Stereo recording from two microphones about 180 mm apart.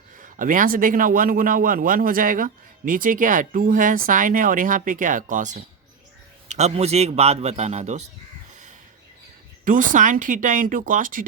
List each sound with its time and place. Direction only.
0.2 s a man's voice: 50° right (ahead or behind)
9.6 s a man's voice: 45° right (ahead or behind)